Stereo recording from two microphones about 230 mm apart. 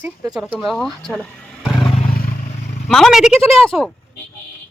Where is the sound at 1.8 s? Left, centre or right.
Left.